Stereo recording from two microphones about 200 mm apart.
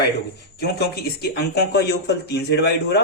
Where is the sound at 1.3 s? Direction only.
55° left (ahead or behind).